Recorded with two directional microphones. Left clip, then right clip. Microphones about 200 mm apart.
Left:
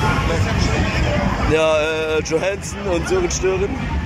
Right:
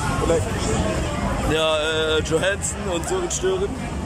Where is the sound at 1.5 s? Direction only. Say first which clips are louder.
Left 4 dB; centre (ahead or behind).